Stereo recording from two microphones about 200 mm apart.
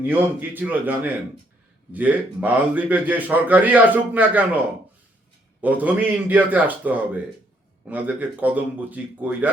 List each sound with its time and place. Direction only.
0.0 s a man's voice: 10° right (ahead or behind)